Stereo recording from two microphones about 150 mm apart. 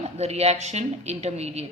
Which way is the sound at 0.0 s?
45° right (ahead or behind).